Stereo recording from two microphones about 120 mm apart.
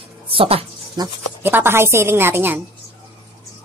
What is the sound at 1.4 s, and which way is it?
A woman's voice, 20° right (ahead or behind).